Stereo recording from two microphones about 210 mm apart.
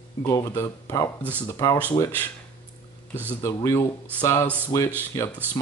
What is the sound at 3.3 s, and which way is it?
Speech, 15° left (ahead or behind).